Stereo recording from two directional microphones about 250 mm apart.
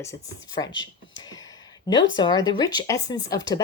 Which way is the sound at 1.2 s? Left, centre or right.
Centre.